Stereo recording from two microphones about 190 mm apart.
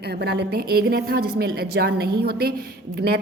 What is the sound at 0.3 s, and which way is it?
A woman's voice, 55° right (ahead or behind).